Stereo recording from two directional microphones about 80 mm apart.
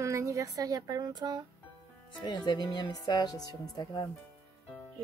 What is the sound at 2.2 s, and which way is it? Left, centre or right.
Speech, left.